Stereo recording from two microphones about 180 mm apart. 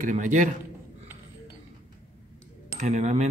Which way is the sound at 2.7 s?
40° right (ahead or behind).